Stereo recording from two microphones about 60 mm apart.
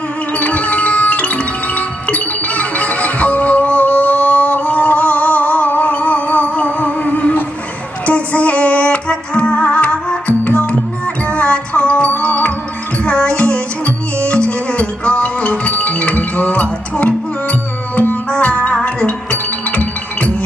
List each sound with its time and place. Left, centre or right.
0.3 s music: left